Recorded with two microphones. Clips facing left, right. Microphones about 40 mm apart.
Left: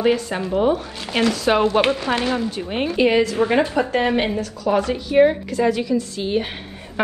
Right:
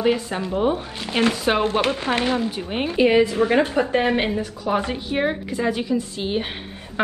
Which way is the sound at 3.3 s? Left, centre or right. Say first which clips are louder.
Even; left.